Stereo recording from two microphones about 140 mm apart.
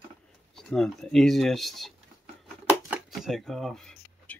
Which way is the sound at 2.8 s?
5° right (ahead or behind).